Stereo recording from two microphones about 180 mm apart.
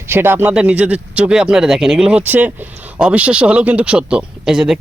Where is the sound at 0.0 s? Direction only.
15° right (ahead or behind).